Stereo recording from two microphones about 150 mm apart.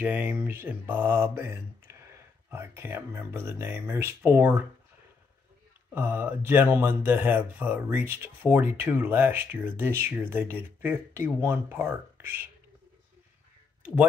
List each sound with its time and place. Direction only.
0.0 s speech: 10° right (ahead or behind)
5.9 s speech: 15° right (ahead or behind)